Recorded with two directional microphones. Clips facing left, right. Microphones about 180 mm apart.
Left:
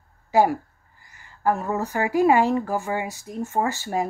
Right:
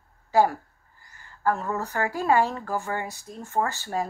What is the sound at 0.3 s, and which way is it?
Speech, 15° left (ahead or behind).